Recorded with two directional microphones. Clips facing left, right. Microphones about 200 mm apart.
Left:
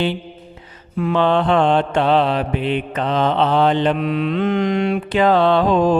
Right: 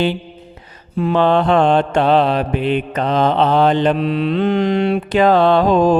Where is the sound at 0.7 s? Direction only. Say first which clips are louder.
Right 2 dB; 35° right (ahead or behind).